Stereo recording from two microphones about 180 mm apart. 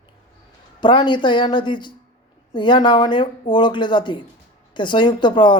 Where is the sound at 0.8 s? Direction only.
25° left (ahead or behind).